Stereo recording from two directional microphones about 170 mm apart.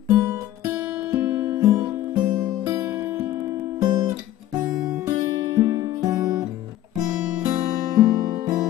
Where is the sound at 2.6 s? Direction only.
15° right (ahead or behind).